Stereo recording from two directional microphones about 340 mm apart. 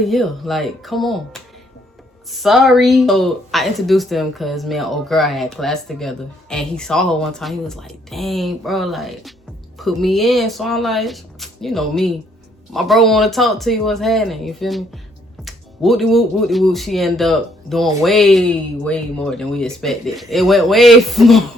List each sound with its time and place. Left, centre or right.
0.0 s speech: centre
2.4 s speech: centre